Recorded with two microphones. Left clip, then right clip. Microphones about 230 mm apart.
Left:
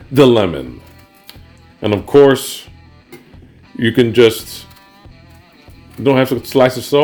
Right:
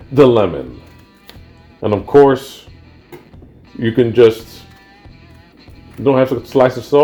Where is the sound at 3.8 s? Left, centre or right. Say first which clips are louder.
Even; left.